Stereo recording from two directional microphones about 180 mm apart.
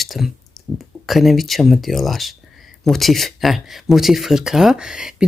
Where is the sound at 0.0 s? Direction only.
Centre (ahead or behind).